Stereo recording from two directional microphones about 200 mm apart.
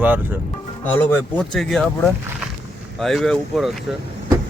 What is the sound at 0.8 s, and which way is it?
Speech, 10° left (ahead or behind).